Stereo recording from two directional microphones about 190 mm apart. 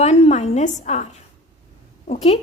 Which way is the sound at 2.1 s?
30° left (ahead or behind).